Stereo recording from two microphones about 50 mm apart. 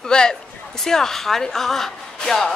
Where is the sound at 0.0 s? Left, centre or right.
Centre.